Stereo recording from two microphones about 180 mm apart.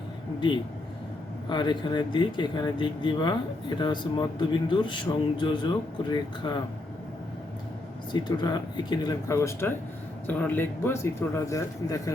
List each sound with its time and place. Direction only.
0.3 s speech: 25° left (ahead or behind)
8.1 s speech: 25° left (ahead or behind)